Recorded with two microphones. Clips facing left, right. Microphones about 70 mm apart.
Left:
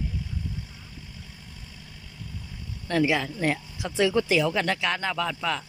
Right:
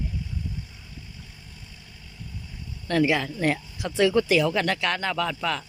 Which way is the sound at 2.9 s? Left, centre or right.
Centre.